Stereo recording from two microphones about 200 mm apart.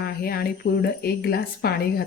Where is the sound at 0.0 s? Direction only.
50° left (ahead or behind).